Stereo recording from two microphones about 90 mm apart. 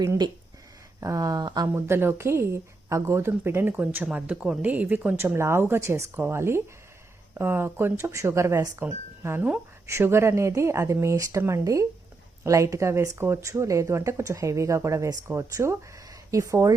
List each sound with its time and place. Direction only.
1.0 s speech: 40° right (ahead or behind)
1.7 s speech: 25° right (ahead or behind)